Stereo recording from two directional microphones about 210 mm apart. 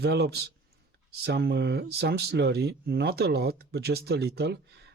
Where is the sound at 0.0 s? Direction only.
50° right (ahead or behind).